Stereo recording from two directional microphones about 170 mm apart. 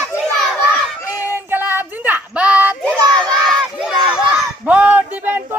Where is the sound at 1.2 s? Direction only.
15° right (ahead or behind).